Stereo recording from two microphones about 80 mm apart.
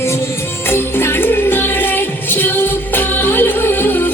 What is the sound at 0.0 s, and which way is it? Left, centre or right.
Music, left.